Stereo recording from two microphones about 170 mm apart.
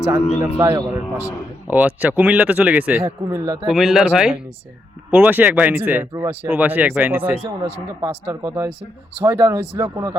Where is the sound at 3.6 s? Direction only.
Centre (ahead or behind); by 10.1 s 15° right (ahead or behind).